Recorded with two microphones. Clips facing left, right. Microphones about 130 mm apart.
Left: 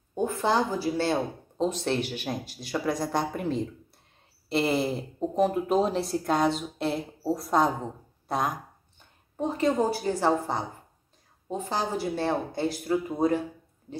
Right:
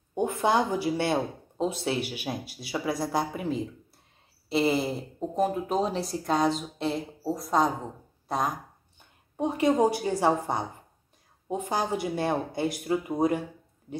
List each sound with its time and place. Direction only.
0.1 s speech: 15° right (ahead or behind); by 8.5 s centre (ahead or behind)
9.4 s speech: 15° right (ahead or behind)